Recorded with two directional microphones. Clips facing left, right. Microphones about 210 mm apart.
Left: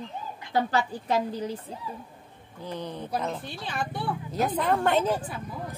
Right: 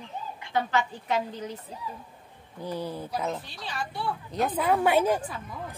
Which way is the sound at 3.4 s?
55° left (ahead or behind).